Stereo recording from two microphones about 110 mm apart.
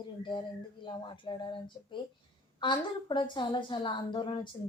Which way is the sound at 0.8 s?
45° left (ahead or behind).